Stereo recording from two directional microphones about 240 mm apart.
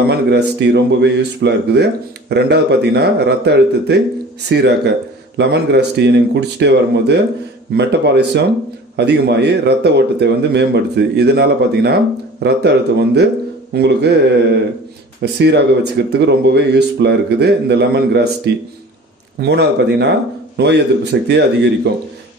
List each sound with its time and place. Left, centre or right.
0.1 s a man's voice: right
15.3 s a man's voice: right